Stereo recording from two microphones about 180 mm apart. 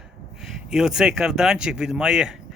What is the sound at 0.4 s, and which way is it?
Speech, 5° right (ahead or behind).